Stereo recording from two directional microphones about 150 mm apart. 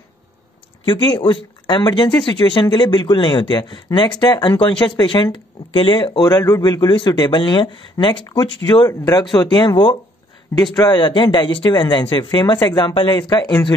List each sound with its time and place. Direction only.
0.8 s speech: 30° left (ahead or behind)